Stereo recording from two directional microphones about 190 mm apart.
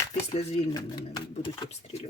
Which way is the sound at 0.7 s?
20° left (ahead or behind).